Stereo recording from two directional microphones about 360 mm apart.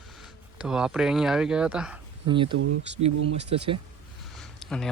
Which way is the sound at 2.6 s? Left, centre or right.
Right.